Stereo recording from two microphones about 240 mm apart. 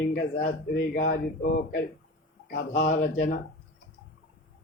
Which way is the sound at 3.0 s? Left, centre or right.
Left.